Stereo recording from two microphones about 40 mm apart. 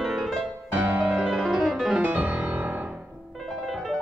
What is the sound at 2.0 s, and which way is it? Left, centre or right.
Music, right.